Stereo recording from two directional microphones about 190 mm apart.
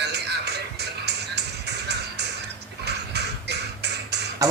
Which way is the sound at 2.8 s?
60° right (ahead or behind).